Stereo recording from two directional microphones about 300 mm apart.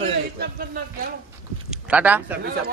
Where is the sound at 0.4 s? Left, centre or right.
Right.